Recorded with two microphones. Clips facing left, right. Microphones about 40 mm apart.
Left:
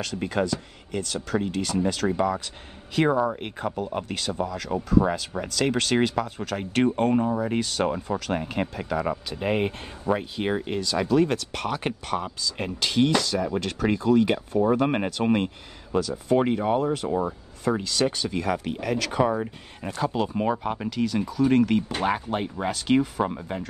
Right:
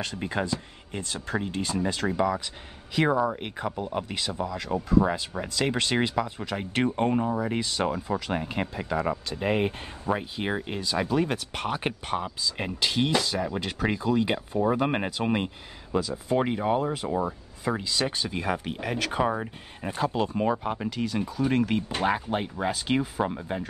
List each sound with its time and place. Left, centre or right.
0.5 s speech: right
2.0 s speech: centre
6.6 s speech: centre
7.2 s speech: centre
10.8 s speech: centre
13.5 s speech: centre
18.1 s speech: right; by 23.6 s centre